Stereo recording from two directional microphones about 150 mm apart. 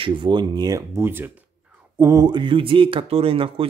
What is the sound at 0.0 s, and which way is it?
Speech, 30° right (ahead or behind).